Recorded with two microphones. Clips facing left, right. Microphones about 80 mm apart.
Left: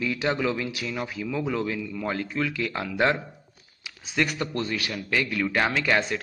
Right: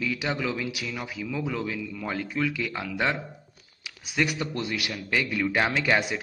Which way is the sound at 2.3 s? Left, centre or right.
Centre.